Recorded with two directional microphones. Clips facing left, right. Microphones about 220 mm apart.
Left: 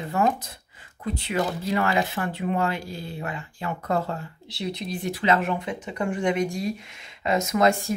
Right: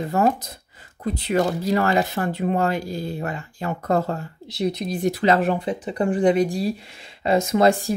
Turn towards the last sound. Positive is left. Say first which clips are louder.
# right 4 dB
turn(degrees=-35)  # may be behind; listen again after turning